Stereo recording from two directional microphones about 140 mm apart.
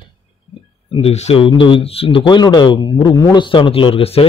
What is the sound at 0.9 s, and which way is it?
Speech, 50° left (ahead or behind).